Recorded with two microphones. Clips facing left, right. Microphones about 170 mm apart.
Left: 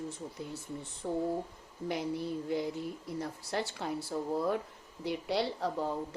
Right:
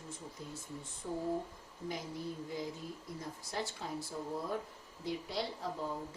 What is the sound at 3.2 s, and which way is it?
A woman's voice, 70° left (ahead or behind).